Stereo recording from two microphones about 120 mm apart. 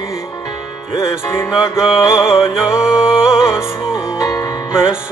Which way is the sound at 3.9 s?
30° left (ahead or behind).